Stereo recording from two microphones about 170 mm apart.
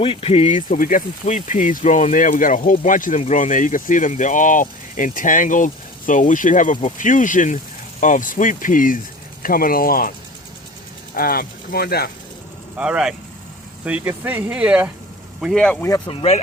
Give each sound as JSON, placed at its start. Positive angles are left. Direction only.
{"t": 0.0, "sound": "speech", "side_deg": 35}
{"t": 12.7, "sound": "speech", "side_deg": -5}
{"t": 16.0, "sound": "speech", "side_deg": 40}